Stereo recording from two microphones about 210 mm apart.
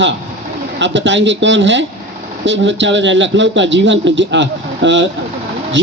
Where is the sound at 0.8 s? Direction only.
60° right (ahead or behind).